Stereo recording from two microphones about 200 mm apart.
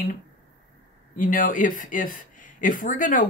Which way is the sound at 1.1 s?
45° left (ahead or behind).